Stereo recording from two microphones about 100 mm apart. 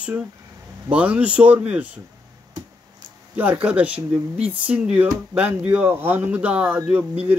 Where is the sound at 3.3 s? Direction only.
15° right (ahead or behind).